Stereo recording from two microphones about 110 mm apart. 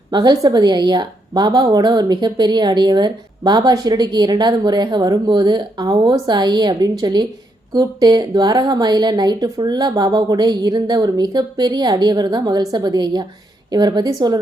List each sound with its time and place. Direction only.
0.1 s a woman's voice: 40° right (ahead or behind)